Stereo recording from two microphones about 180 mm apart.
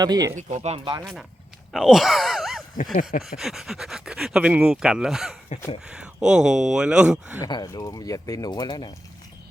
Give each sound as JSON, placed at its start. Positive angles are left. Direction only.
{"t": 0.0, "sound": "speech", "side_deg": -20}
{"t": 0.3, "sound": "speech", "side_deg": -40}
{"t": 1.7, "sound": "groan", "side_deg": 0}
{"t": 2.9, "sound": "a sound", "side_deg": 50}
{"t": 3.2, "sound": "speech", "side_deg": 0}
{"t": 7.4, "sound": "speech", "side_deg": 20}